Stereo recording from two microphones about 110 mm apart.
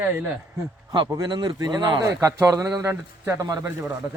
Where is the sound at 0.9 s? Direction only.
40° right (ahead or behind).